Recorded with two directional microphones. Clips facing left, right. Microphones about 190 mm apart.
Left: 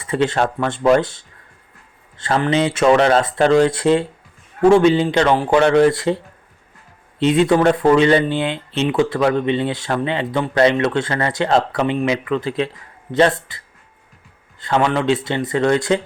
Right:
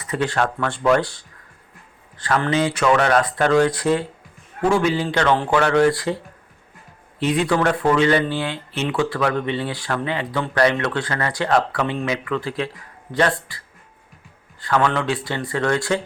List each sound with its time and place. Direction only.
0.0 s speech: 25° left (ahead or behind)
7.2 s speech: 20° left (ahead or behind)
14.6 s speech: 20° left (ahead or behind)